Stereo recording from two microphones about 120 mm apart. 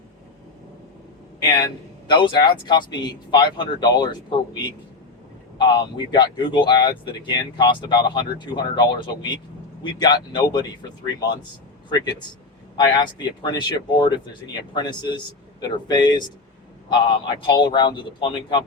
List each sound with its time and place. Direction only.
1.5 s speech: 35° left (ahead or behind)
5.5 s speech: 40° left (ahead or behind)
12.7 s speech: 35° left (ahead or behind)